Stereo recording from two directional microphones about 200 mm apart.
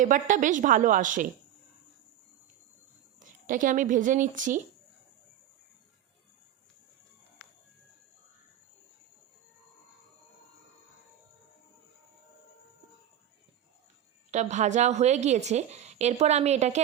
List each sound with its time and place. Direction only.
0.0 s a woman's voice: 40° right (ahead or behind)
3.2 s speech: 40° right (ahead or behind)
14.3 s a woman's voice: 35° right (ahead or behind)